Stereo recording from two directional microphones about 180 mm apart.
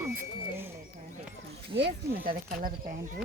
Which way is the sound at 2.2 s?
50° right (ahead or behind).